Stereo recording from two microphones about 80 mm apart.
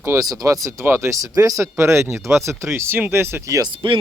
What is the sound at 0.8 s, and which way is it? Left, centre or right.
Speech, right.